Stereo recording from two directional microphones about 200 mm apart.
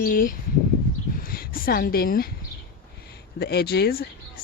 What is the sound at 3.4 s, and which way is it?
Speech, 55° left (ahead or behind).